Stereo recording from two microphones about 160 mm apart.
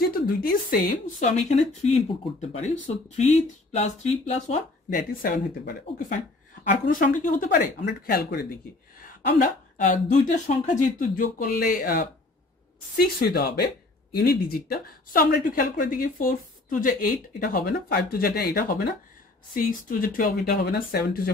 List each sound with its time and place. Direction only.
0.0 s speech: 65° left (ahead or behind)
1.3 s speech: 45° left (ahead or behind)
4.8 s speech: 65° left (ahead or behind)
6.7 s speech: 60° left (ahead or behind)
7.7 s speech: 80° left
9.4 s speech: 50° left (ahead or behind); by 18.7 s 70° left (ahead or behind)
19.5 s speech: 60° left (ahead or behind)